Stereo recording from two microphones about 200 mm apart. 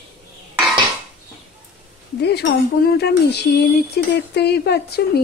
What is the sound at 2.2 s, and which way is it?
A woman's voice, 55° left (ahead or behind).